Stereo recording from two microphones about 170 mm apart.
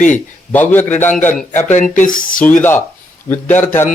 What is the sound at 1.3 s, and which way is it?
Speech, 45° left (ahead or behind).